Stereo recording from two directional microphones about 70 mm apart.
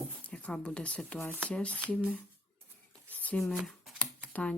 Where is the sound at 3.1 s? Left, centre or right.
Left.